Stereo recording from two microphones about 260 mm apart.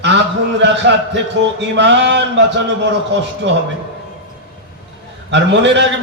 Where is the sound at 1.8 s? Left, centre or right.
Right.